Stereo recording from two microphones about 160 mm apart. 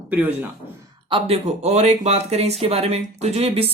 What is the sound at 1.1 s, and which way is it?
Speech, 35° right (ahead or behind).